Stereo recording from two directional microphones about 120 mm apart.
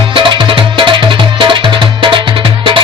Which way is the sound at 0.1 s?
45° right (ahead or behind).